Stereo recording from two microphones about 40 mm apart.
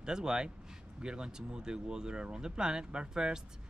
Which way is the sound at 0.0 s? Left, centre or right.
Centre.